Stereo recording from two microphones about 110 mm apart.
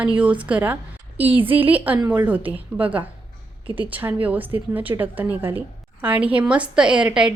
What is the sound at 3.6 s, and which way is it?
Speech, 50° right (ahead or behind).